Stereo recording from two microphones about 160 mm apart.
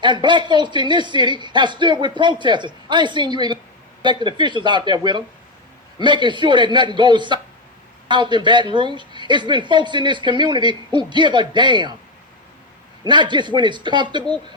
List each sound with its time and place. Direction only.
0.0 s a woman's voice: 30° right (ahead or behind)
13.1 s a woman's voice: 30° right (ahead or behind)